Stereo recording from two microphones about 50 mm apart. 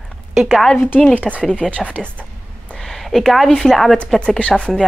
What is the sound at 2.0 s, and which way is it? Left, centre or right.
Speech, centre.